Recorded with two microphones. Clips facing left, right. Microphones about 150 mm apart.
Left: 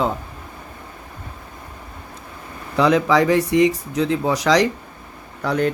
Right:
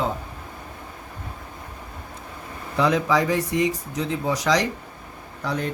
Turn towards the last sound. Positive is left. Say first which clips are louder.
# left 7 dB
turn(degrees=70)  # may be behind; listen again after turning